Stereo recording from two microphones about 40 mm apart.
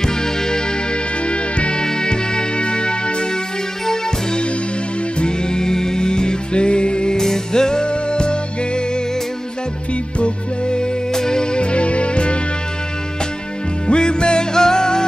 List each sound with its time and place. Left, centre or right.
0.0 s music: centre
1.2 s music: left
10.1 s music: left
13.8 s music: left